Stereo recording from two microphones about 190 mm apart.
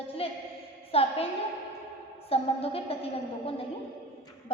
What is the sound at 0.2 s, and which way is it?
A woman's voice, 30° left (ahead or behind).